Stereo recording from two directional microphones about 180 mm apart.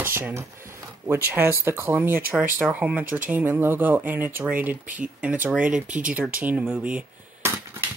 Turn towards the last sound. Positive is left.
turn(degrees=-10)  # may be behind; listen again after turning